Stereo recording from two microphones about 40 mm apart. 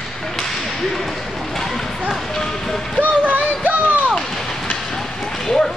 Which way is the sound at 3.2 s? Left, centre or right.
Right.